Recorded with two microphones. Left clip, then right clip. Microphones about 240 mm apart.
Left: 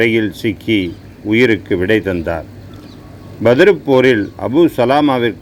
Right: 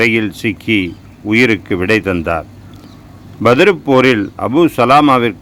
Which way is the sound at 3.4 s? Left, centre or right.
Centre.